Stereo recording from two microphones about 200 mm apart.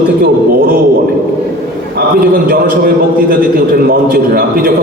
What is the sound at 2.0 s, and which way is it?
A man's voice, 45° right (ahead or behind).